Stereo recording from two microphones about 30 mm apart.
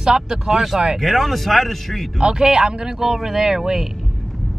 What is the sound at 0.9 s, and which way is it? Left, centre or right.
Speech, centre.